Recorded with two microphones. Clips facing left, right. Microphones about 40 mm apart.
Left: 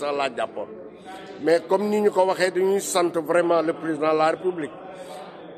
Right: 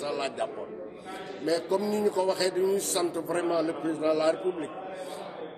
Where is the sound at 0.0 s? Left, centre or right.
Left.